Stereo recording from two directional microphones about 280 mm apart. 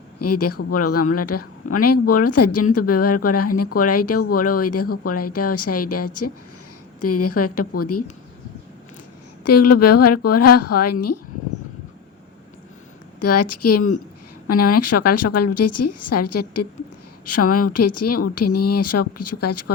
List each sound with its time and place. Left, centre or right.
0.2 s speech: left
9.4 s speech: left
13.1 s speech: left